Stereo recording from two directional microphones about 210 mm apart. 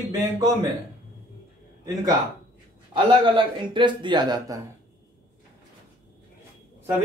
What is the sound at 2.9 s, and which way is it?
Speech, 25° right (ahead or behind).